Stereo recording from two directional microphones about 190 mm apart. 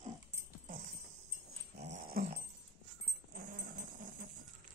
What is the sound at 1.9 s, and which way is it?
Dog, 50° right (ahead or behind).